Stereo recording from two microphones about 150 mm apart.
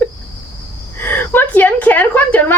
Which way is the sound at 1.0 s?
15° left (ahead or behind).